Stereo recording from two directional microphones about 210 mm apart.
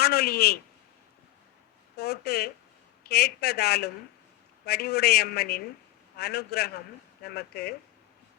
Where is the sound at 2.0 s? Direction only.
50° left (ahead or behind).